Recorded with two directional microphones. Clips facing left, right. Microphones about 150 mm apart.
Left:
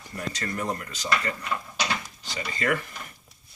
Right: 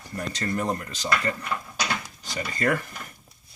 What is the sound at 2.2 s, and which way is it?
Speech, 40° right (ahead or behind).